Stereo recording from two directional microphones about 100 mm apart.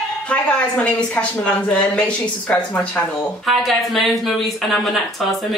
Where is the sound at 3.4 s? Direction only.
Centre (ahead or behind).